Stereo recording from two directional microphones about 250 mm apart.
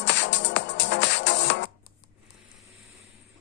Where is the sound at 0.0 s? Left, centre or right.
Left.